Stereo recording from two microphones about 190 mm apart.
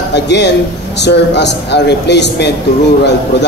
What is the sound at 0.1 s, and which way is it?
A man's voice, 65° left (ahead or behind).